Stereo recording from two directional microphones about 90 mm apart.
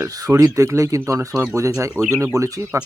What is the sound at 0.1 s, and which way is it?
Speech, 40° right (ahead or behind).